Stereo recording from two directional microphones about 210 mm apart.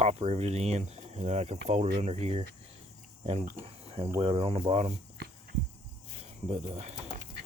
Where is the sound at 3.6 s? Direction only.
30° right (ahead or behind).